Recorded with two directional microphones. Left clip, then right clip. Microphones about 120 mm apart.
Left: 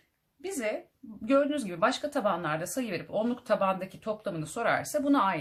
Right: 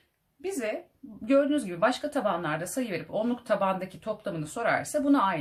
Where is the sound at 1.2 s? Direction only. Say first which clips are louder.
Right 2 dB; 25° left (ahead or behind).